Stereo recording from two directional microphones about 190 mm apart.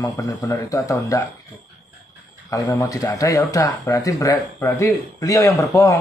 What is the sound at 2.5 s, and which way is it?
Speech, 15° left (ahead or behind).